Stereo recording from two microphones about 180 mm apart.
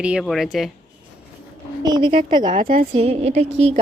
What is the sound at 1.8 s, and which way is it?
Speech, 25° right (ahead or behind).